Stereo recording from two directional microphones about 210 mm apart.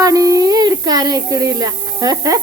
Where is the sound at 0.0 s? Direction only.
15° right (ahead or behind).